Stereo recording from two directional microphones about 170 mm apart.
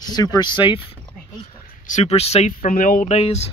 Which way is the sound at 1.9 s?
40° left (ahead or behind).